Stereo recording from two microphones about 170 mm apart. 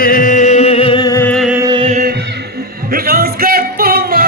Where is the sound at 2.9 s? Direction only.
60° right (ahead or behind).